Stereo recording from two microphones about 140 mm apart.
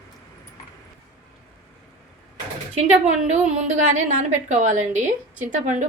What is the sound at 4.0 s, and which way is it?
A woman's voice, 60° right (ahead or behind).